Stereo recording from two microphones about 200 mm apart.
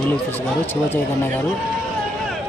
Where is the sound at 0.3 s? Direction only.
10° left (ahead or behind).